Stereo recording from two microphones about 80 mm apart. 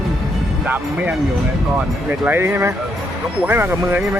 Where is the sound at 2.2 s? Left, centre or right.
Right.